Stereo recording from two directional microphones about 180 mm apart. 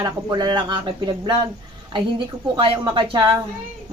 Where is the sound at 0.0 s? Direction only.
25° right (ahead or behind).